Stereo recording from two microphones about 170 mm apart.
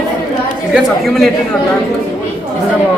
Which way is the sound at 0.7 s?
Centre (ahead or behind).